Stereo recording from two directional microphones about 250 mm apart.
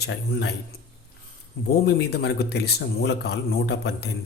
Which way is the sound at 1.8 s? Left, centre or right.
Left.